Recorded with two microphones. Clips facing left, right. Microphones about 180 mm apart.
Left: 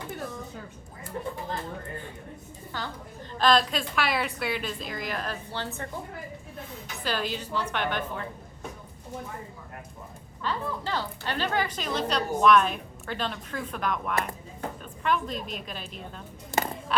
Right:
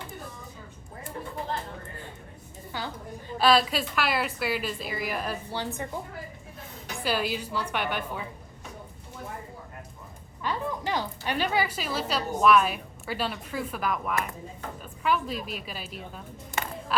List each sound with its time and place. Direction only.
2.7 s a woman's voice: 10° right (ahead or behind)
7.0 s a woman's voice: 10° right (ahead or behind)
10.4 s a woman's voice: 15° right (ahead or behind)
16.6 s a sound: 40° left (ahead or behind)